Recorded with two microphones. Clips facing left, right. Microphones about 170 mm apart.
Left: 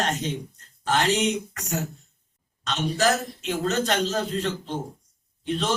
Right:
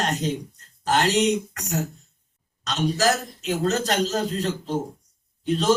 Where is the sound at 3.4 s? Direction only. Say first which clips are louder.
Right 2 dB; 35° right (ahead or behind).